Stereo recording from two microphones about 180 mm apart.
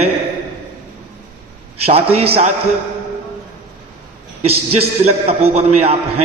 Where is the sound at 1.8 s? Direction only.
35° right (ahead or behind).